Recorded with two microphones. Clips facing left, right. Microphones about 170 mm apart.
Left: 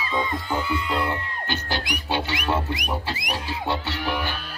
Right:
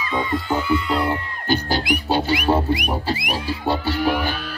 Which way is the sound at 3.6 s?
45° right (ahead or behind).